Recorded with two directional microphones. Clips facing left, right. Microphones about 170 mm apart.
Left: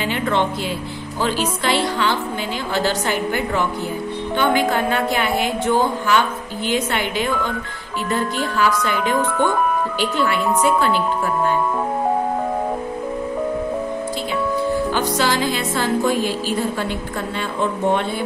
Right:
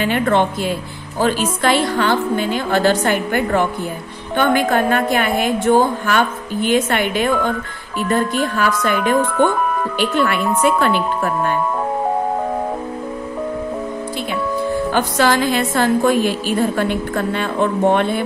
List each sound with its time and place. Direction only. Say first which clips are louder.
0.0 s a woman's voice: right 4 dB; 55° right (ahead or behind)
9.9 s speech: right 3 dB; 60° right (ahead or behind)
14.9 s speech: right 3 dB; 55° right (ahead or behind)